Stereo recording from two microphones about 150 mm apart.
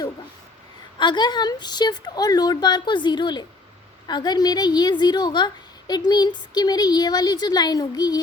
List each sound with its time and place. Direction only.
0.9 s a woman's voice: 30° left (ahead or behind)